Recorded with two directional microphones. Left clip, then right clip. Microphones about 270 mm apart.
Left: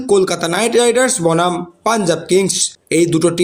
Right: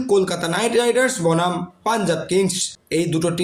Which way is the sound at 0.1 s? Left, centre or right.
Left.